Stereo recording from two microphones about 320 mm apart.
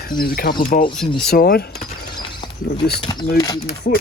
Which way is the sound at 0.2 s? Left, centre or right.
Left.